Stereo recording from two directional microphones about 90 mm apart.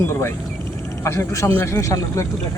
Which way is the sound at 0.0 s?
30° left (ahead or behind).